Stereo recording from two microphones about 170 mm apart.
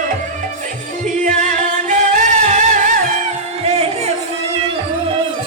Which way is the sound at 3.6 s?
35° right (ahead or behind).